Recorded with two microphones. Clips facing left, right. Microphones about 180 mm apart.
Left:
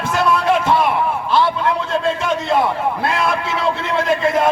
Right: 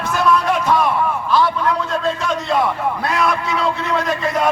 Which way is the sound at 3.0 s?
25° left (ahead or behind).